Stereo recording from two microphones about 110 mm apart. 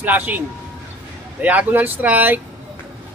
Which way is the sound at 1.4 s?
15° right (ahead or behind).